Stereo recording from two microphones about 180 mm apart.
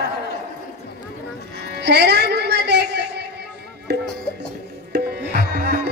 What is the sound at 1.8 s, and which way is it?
Music, 70° right (ahead or behind).